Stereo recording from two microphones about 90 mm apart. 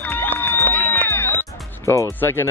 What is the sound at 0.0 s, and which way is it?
Music, 20° left (ahead or behind).